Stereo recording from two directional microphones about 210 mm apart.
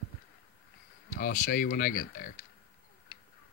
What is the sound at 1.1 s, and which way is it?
Speech, 45° left (ahead or behind).